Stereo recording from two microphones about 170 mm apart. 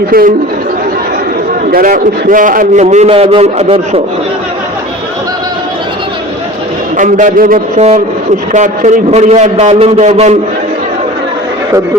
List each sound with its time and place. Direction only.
0.1 s speech: 60° right (ahead or behind)
1.6 s a man's voice: 50° right (ahead or behind)
2.8 s a man's voice: 40° right (ahead or behind)
6.9 s a man's voice: 50° right (ahead or behind)